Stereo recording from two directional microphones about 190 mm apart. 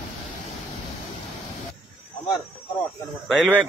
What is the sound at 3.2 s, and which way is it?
Speech, centre (ahead or behind).